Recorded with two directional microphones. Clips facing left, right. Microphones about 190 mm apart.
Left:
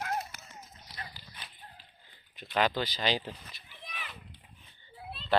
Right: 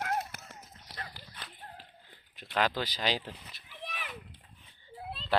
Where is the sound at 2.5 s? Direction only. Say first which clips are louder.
Left 2 dB; 5° right (ahead or behind).